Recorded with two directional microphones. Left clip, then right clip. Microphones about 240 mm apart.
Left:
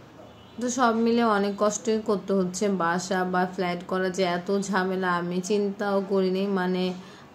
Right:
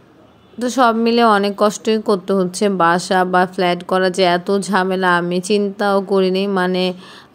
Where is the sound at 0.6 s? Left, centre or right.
Right.